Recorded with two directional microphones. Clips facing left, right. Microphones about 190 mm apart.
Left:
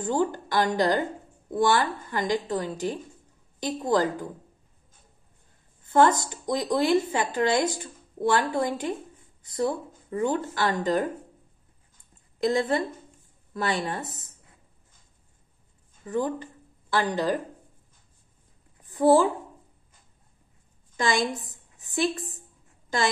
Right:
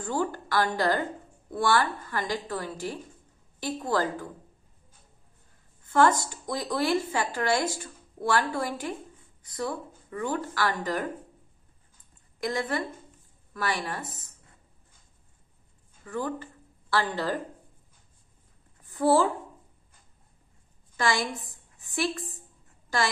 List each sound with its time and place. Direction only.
0.0 s a woman's voice: 20° left (ahead or behind)
5.9 s a woman's voice: 20° left (ahead or behind)
12.4 s a woman's voice: 25° left (ahead or behind)
16.1 s a woman's voice: 20° left (ahead or behind)
18.9 s a woman's voice: 20° left (ahead or behind)
20.9 s a woman's voice: 20° left (ahead or behind)
21.5 s a sound: 20° left (ahead or behind)